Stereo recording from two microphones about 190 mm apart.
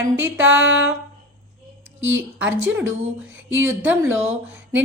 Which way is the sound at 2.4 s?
5° right (ahead or behind).